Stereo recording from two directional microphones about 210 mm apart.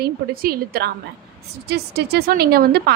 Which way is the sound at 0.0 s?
45° right (ahead or behind).